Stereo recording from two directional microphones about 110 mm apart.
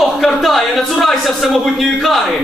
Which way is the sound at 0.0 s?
Centre (ahead or behind).